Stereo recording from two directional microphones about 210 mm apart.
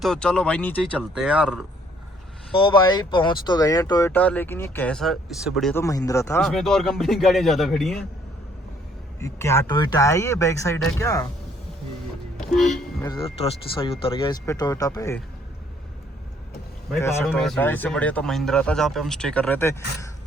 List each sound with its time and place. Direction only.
0.0 s speech: 5° left (ahead or behind)
1.1 s speech: 5° right (ahead or behind)
2.5 s speech: 25° left (ahead or behind); by 5.8 s centre (ahead or behind)
5.8 s speech: 15° left (ahead or behind)
6.4 s speech: centre (ahead or behind)
9.2 s speech: 15° left (ahead or behind)
12.5 s speech: centre (ahead or behind)
13.4 s speech: 25° left (ahead or behind)
17.0 s speech: 10° left (ahead or behind)